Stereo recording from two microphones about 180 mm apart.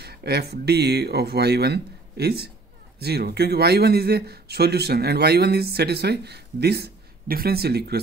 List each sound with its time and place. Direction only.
0.0 s a man's voice: 60° right (ahead or behind)